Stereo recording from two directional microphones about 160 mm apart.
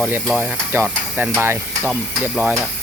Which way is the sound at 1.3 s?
15° right (ahead or behind).